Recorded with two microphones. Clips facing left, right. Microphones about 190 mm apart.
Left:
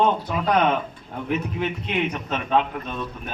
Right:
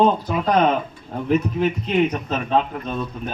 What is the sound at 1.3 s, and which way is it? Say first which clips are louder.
A man's voice: right 6 dB; 40° right (ahead or behind).